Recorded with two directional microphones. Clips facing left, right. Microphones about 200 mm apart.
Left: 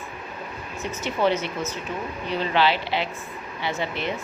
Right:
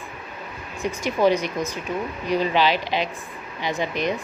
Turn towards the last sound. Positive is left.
turn(degrees=-15)  # may be behind; listen again after turning